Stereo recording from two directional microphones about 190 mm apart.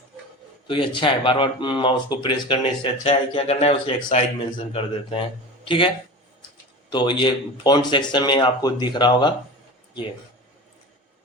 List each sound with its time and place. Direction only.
0.7 s speech: 25° left (ahead or behind)
6.9 s speech: 25° left (ahead or behind)